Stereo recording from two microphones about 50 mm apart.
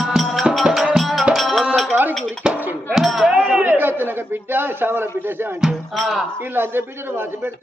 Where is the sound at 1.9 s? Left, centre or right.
Right.